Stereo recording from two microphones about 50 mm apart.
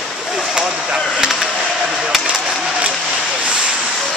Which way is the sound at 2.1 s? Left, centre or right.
Centre.